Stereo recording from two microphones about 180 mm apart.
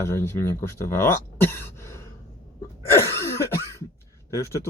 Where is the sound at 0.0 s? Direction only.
15° left (ahead or behind).